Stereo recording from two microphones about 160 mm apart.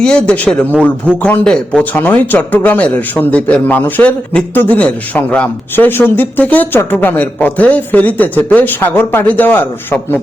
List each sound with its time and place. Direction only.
0.0 s speech: 5° left (ahead or behind)